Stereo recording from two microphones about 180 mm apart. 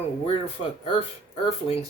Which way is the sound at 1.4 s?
35° left (ahead or behind).